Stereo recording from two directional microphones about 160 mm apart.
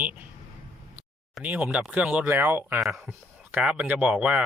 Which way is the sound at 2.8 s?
Centre (ahead or behind).